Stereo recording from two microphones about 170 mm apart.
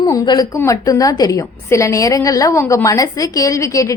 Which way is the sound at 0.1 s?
20° left (ahead or behind).